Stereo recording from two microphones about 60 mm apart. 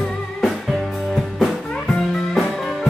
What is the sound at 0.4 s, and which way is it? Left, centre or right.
Music, centre.